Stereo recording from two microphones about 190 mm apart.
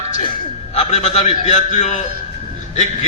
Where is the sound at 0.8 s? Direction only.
35° left (ahead or behind).